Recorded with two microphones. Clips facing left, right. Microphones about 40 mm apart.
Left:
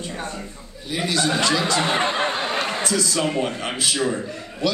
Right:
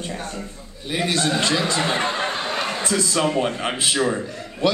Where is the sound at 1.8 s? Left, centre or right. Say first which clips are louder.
Left 1 dB; centre.